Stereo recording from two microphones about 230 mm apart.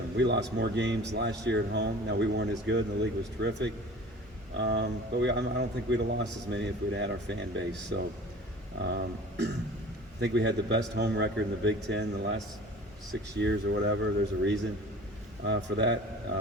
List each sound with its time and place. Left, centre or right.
0.2 s speech: right
13.4 s speech: right